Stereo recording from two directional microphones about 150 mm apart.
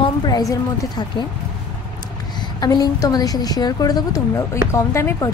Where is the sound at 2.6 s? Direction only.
25° left (ahead or behind).